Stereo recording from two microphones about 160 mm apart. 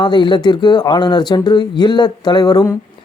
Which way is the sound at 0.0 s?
30° left (ahead or behind).